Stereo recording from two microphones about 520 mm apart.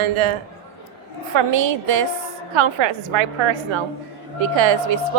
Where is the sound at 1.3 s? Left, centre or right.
Right.